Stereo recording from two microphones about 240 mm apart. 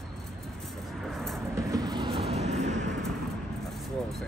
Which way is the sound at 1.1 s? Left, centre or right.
Centre.